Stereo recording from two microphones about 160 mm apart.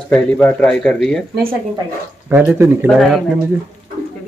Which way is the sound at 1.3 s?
65° right (ahead or behind).